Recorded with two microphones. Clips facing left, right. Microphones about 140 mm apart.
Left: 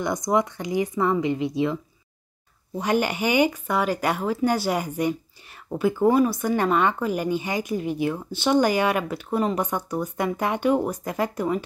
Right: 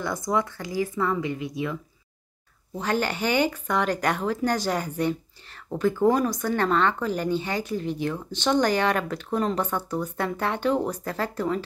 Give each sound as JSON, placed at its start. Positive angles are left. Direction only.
{"t": 0.0, "sound": "speech", "side_deg": 20}
{"t": 2.8, "sound": "speech", "side_deg": 15}